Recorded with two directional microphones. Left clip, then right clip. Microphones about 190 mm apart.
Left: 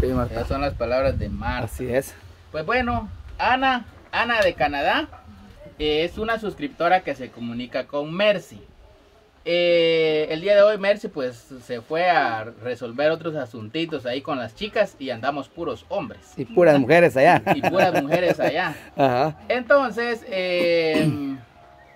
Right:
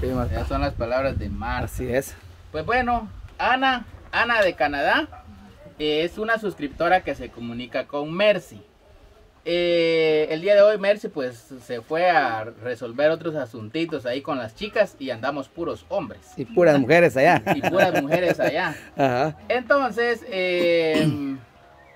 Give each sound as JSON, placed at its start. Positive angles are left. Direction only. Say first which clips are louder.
{"t": 0.0, "sound": "bird", "louder": "left 3 dB", "side_deg": 0}
{"t": 0.5, "sound": "speech", "louder": "even", "side_deg": 25}
{"t": 1.8, "sound": "speech", "louder": "left 2 dB", "side_deg": -5}